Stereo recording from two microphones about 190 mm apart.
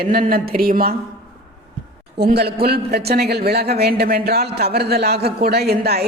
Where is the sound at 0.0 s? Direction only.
50° right (ahead or behind).